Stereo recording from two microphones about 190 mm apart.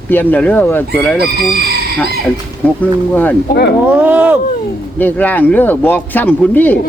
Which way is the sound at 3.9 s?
10° right (ahead or behind).